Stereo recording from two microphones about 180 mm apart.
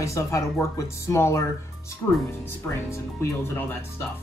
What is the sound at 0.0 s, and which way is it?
Speech, 15° left (ahead or behind).